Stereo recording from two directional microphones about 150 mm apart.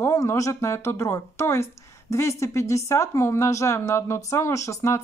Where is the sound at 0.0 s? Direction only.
20° left (ahead or behind).